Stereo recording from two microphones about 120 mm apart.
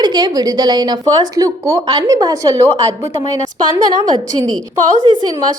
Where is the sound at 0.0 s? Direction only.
35° right (ahead or behind).